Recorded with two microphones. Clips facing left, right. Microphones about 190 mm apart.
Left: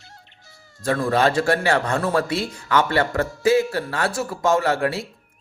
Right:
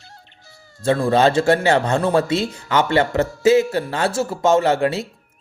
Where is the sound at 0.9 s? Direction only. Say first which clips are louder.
Right 4 dB; 25° right (ahead or behind).